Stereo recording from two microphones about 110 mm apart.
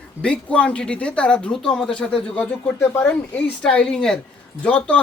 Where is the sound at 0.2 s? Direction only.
10° left (ahead or behind).